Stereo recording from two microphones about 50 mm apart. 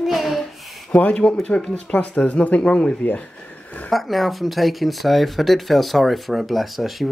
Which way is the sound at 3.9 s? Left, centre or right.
Centre.